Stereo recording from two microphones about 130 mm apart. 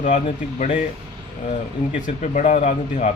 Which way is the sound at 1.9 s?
75° left (ahead or behind).